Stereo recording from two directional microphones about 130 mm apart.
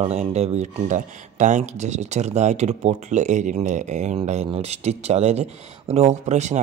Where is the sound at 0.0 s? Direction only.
60° right (ahead or behind).